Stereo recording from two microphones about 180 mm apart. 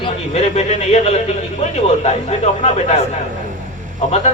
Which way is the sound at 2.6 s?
40° left (ahead or behind).